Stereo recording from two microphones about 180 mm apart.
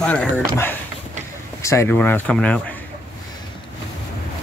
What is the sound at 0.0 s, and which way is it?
Speech, 5° left (ahead or behind).